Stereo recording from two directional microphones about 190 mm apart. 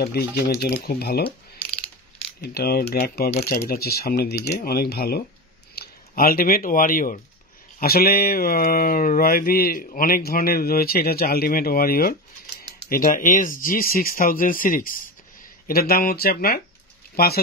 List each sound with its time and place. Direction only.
0.0 s speech: 55° left (ahead or behind)
2.4 s speech: 55° left (ahead or behind)